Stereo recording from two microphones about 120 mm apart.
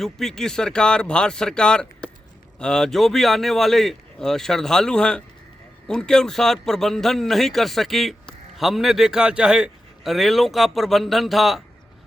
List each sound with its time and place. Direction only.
0.0 s speech: 5° left (ahead or behind)